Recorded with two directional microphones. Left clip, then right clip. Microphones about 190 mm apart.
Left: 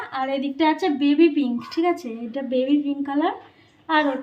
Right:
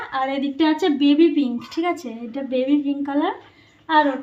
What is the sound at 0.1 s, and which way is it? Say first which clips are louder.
A woman's voice: right 2 dB; 25° right (ahead or behind).